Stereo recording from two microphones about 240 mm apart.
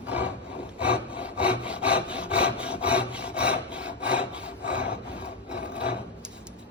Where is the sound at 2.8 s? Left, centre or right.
Centre.